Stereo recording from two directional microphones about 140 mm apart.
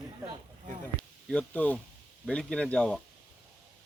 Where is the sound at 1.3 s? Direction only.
10° left (ahead or behind).